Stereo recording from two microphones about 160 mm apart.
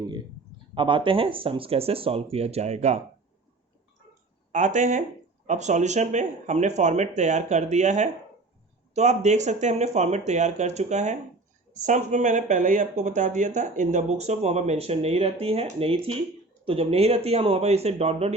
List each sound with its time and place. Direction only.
0.7 s speech: 30° right (ahead or behind)
4.5 s speech: 50° right (ahead or behind)